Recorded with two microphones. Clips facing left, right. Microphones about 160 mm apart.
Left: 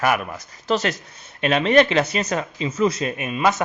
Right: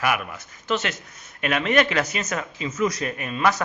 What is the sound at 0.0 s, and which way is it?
A man's voice, 40° left (ahead or behind).